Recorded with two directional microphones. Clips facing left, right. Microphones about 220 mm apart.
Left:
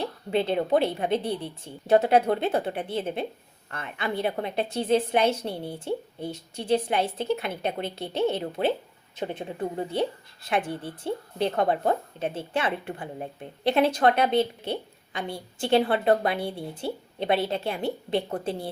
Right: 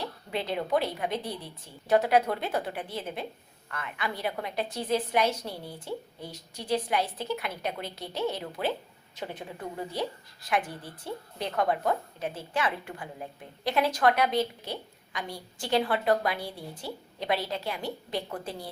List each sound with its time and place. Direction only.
0.0 s a woman's voice: 25° left (ahead or behind)